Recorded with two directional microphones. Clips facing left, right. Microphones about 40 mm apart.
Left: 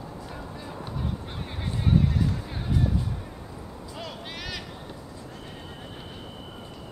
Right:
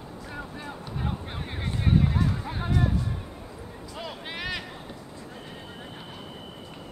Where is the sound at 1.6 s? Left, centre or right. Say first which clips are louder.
Even; centre.